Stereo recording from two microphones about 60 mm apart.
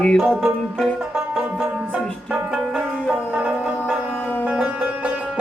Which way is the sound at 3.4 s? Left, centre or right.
Right.